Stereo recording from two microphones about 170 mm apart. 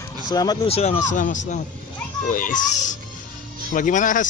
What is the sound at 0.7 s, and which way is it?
Speech, 40° left (ahead or behind).